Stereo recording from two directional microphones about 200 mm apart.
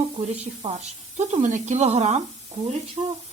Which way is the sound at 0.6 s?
30° right (ahead or behind).